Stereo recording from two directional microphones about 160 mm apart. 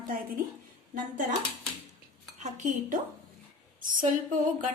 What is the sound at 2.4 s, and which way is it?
Speech, 50° right (ahead or behind).